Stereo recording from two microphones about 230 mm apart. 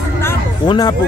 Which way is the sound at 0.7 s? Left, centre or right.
Centre.